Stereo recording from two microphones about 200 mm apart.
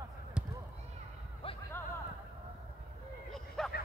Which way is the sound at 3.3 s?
Centre (ahead or behind).